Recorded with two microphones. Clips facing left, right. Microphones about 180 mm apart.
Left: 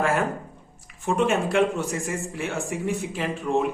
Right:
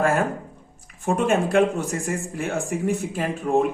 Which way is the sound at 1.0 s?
50° right (ahead or behind).